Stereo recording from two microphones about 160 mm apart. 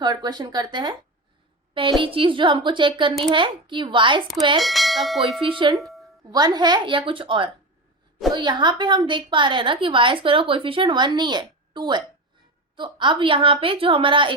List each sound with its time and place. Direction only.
0.0 s a woman's voice: 25° right (ahead or behind)
4.6 s church bell: centre (ahead or behind)
5.4 s a woman's voice: 30° right (ahead or behind)
5.7 s music: centre (ahead or behind)
6.3 s a woman's voice: 25° right (ahead or behind)